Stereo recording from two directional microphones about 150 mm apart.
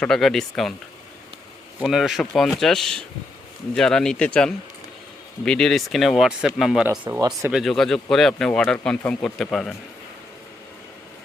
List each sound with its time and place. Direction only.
0.0 s speech: 5° left (ahead or behind)
1.8 s speech: centre (ahead or behind)
7.1 s speech: 20° right (ahead or behind)
7.5 s speech: centre (ahead or behind)